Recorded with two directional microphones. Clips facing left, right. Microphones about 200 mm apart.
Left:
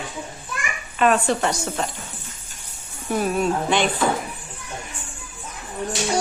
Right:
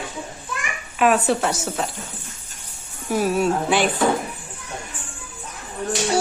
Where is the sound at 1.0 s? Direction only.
5° right (ahead or behind).